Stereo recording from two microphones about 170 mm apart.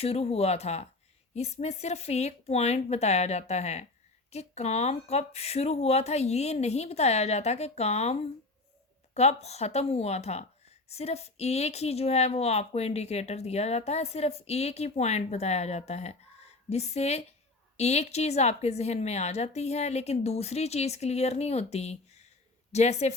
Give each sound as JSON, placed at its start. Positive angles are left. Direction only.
{"t": 0.0, "sound": "a woman's voice", "side_deg": 35}